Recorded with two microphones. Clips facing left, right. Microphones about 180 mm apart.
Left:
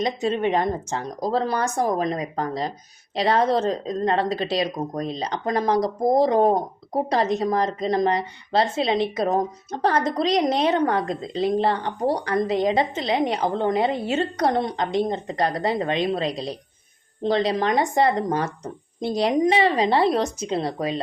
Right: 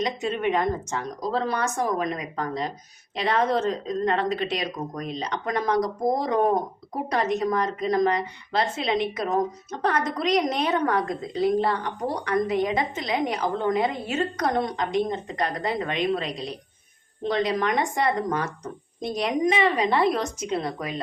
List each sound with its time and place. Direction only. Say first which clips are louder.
0.0 s speech: left 3 dB; 30° left (ahead or behind)